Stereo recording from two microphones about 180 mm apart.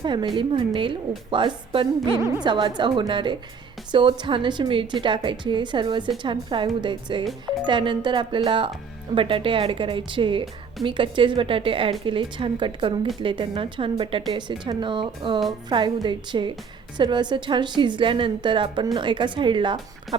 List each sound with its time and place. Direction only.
0.0 s a woman's voice: 25° right (ahead or behind)